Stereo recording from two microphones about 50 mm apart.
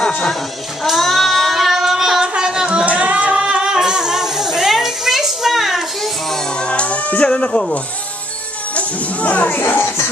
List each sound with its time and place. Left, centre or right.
0.8 s child singing: centre
2.2 s singing: centre
3.7 s child singing: centre
6.3 s music: centre
7.2 s sheep: centre
8.7 s speech: left